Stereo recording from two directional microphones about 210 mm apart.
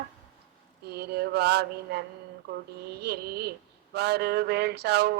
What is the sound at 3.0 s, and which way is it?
Speech, 50° right (ahead or behind).